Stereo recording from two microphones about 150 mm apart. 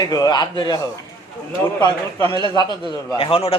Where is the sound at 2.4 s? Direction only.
30° left (ahead or behind).